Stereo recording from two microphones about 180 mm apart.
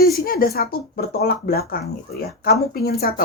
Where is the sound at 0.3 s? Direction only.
55° left (ahead or behind).